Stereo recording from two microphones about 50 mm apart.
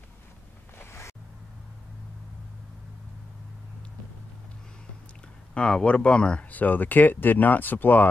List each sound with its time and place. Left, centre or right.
0.7 s music: left
5.5 s speech: centre
6.5 s speech: left